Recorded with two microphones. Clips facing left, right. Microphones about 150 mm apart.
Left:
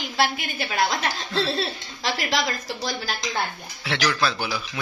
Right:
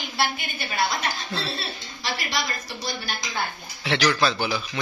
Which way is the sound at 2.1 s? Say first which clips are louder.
Left 4 dB; 90° left.